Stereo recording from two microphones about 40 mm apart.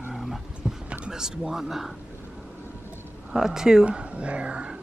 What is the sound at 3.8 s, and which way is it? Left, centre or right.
Speech, right.